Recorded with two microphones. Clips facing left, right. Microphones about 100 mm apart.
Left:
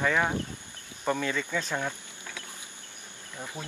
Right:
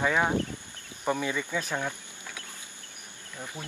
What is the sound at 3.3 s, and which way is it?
Speech, 15° left (ahead or behind).